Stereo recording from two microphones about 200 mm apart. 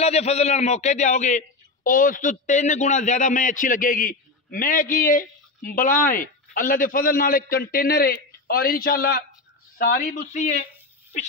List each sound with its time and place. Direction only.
0.0 s a man's voice: 30° left (ahead or behind)